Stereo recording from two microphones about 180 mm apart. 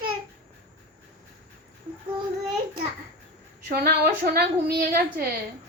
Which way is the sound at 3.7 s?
60° right (ahead or behind).